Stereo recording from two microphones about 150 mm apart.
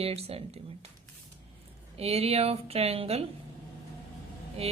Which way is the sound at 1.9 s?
45° right (ahead or behind).